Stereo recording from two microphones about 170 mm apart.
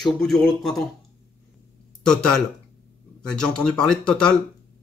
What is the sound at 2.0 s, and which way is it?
Speech, 5° left (ahead or behind).